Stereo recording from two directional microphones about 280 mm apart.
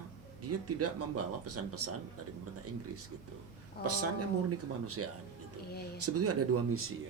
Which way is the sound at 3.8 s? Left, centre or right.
Right.